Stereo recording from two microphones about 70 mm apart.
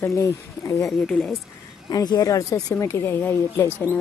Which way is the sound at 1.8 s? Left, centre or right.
Left.